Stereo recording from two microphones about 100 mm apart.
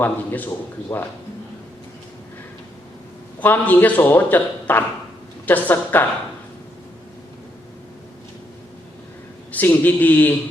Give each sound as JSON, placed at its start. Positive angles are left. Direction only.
{"t": 0.0, "sound": "a man's voice", "side_deg": 20}
{"t": 3.4, "sound": "a man's voice", "side_deg": 20}
{"t": 9.5, "sound": "a man's voice", "side_deg": 15}